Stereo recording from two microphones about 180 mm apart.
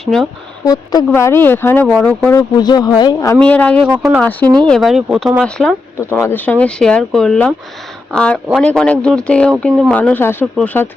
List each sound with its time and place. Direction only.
0.0 s speech: centre (ahead or behind)
0.6 s speech: 20° left (ahead or behind)
2.3 s speech: 20° left (ahead or behind)
3.3 s speech: 10° left (ahead or behind)